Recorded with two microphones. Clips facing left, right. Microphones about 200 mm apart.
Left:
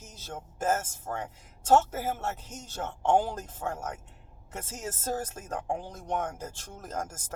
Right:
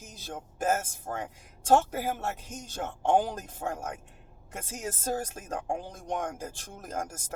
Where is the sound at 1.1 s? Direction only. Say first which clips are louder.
Even; 35° right (ahead or behind).